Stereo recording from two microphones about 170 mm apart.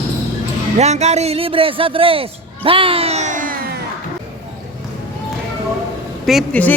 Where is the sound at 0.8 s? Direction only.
40° right (ahead or behind); by 3.8 s 60° right (ahead or behind).